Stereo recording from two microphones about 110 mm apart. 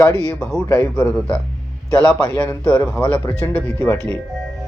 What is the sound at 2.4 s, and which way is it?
Speech, 15° left (ahead or behind).